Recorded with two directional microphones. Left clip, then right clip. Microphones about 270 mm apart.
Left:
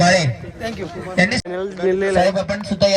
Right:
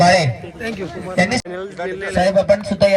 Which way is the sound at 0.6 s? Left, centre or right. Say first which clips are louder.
Right 1 dB; left.